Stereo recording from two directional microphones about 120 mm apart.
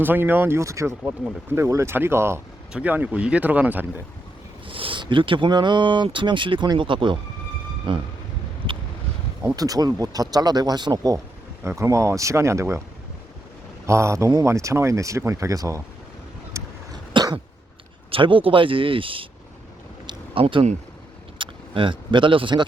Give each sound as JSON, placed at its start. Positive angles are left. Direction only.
{"t": 0.0, "sound": "speech", "side_deg": -15}
{"t": 4.7, "sound": "speech", "side_deg": -45}
{"t": 9.6, "sound": "speech", "side_deg": -30}
{"t": 13.8, "sound": "speech", "side_deg": -25}
{"t": 16.5, "sound": "vehicle", "side_deg": -25}
{"t": 17.2, "sound": "cough", "side_deg": -40}
{"t": 18.1, "sound": "speech", "side_deg": -45}
{"t": 20.1, "sound": "a sound", "side_deg": -45}
{"t": 21.3, "sound": "vehicle", "side_deg": -45}